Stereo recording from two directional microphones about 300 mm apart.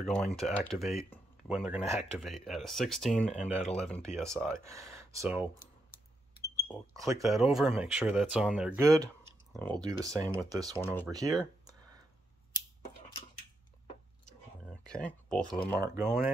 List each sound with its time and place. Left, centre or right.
0.0 s speech: centre
4.6 s speech: centre
14.2 s a sound: centre
15.4 s speech: centre
15.8 s speech: centre